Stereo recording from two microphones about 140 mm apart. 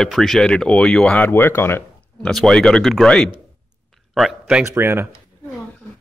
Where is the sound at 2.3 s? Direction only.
5° left (ahead or behind).